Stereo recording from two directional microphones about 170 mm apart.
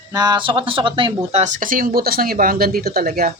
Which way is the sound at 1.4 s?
50° right (ahead or behind).